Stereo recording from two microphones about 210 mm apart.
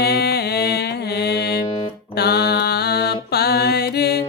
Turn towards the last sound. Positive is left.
turn(degrees=50)  # may be behind; listen again after turning